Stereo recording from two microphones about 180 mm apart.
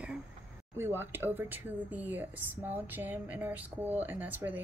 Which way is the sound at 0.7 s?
10° right (ahead or behind).